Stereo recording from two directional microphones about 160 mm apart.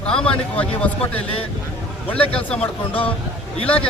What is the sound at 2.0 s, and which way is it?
Speech, 10° left (ahead or behind).